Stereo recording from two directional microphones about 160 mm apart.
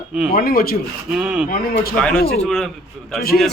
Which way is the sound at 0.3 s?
65° left (ahead or behind).